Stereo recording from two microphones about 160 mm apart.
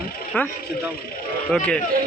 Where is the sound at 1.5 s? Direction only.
5° left (ahead or behind).